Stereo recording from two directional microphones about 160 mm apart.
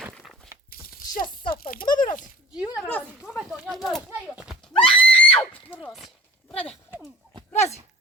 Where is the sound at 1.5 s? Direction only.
65° left (ahead or behind).